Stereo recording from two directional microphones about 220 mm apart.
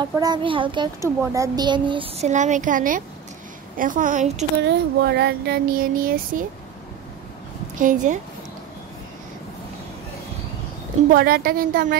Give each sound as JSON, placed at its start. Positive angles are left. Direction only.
{"t": 0.0, "sound": "a woman's voice", "side_deg": -20}
{"t": 4.6, "sound": "a sound", "side_deg": -50}
{"t": 7.8, "sound": "a woman's voice", "side_deg": -35}
{"t": 11.1, "sound": "a woman's voice", "side_deg": -45}